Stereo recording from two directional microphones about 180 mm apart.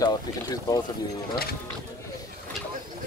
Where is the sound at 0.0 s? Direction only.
20° left (ahead or behind).